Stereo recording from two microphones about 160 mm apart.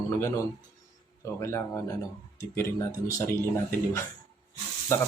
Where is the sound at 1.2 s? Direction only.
20° left (ahead or behind).